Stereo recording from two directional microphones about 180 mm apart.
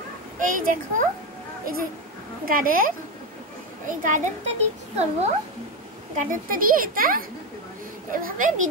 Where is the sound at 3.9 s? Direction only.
45° right (ahead or behind).